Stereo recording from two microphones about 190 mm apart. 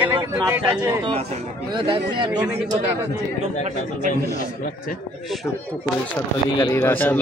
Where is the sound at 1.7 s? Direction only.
25° right (ahead or behind).